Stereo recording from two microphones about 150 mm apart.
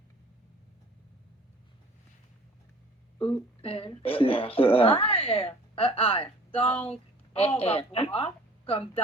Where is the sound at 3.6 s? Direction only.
35° left (ahead or behind).